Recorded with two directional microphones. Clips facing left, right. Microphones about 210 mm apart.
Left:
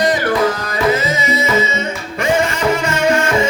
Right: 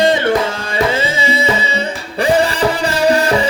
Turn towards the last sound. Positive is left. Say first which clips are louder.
# right 2 dB
turn(degrees=-35)  # may be behind; listen again after turning